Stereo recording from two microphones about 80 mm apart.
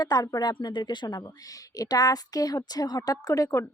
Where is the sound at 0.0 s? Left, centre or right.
Left.